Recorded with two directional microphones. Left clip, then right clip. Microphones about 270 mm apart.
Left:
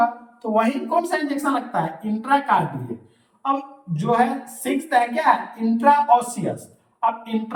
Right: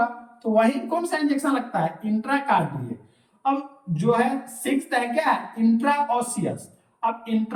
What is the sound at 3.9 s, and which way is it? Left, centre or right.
Speech, centre.